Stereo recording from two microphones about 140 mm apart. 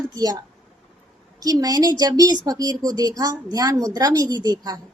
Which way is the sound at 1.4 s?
25° right (ahead or behind).